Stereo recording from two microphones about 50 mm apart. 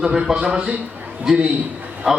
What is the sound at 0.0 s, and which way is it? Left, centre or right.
Speech, centre.